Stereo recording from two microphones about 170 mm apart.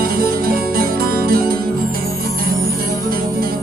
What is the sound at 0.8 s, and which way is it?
Music, 60° right (ahead or behind).